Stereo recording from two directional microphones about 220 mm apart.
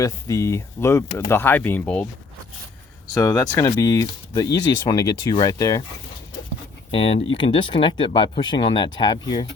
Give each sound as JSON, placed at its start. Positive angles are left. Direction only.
{"t": 0.0, "sound": "speech", "side_deg": 15}
{"t": 3.2, "sound": "speech", "side_deg": 15}
{"t": 6.9, "sound": "speech", "side_deg": 25}